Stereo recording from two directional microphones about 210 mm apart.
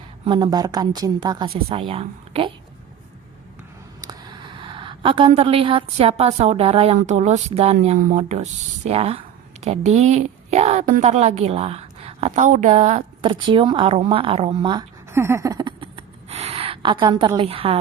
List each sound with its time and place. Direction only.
0.3 s a woman's voice: 20° right (ahead or behind)
4.0 s a woman's voice: 20° right (ahead or behind)